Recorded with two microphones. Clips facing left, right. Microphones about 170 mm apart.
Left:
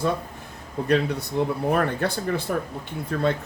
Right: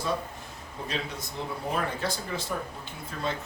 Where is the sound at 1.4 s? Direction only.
55° left (ahead or behind).